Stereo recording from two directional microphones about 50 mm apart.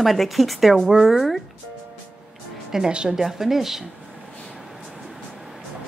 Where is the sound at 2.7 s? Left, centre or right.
Centre.